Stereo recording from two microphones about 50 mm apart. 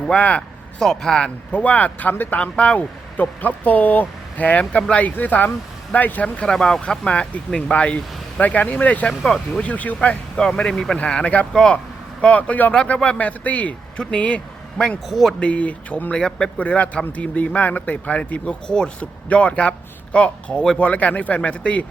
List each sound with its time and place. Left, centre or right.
0.1 s speech: left
0.8 s speech: centre
1.5 s speech: left
2.4 s speech: left
6.4 s speech: centre; by 10.2 s left
10.3 s speech: centre
16.1 s speech: centre
16.6 s speech: left